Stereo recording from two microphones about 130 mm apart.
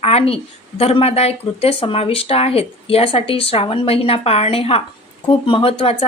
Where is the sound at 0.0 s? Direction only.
50° left (ahead or behind).